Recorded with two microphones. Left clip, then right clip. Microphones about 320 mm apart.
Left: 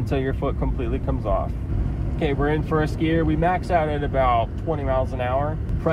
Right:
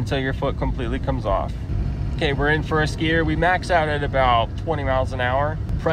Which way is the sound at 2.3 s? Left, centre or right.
Right.